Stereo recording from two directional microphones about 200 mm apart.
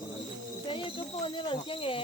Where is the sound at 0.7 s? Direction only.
25° left (ahead or behind).